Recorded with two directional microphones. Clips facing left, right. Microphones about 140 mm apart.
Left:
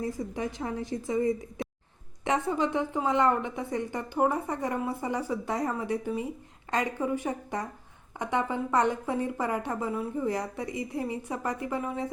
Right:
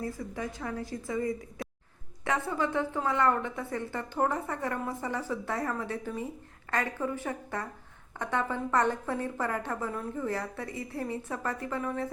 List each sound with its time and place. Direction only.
0.0 s a woman's voice: 20° left (ahead or behind)